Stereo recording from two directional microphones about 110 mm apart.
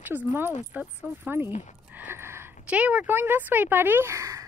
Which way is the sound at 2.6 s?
10° right (ahead or behind).